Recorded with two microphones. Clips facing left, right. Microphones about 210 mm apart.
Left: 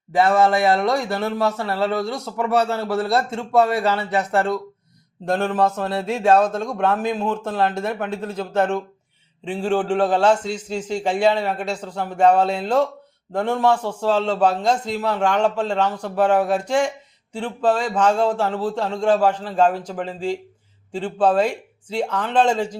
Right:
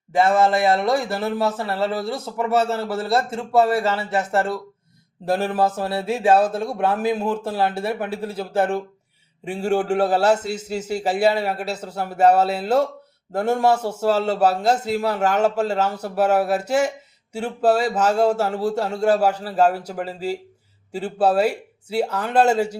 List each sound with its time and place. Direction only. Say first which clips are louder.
0.1 s a man's voice: left 1 dB; centre (ahead or behind)